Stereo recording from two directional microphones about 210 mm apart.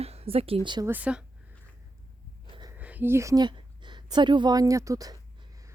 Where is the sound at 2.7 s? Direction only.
10° right (ahead or behind).